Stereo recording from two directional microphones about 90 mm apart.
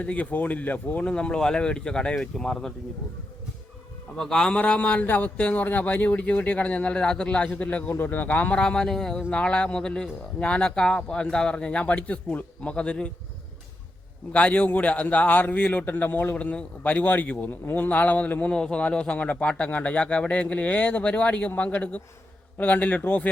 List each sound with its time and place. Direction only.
0.0 s a man's voice: 15° left (ahead or behind)
4.2 s a man's voice: 5° left (ahead or behind)
14.3 s a man's voice: 15° left (ahead or behind)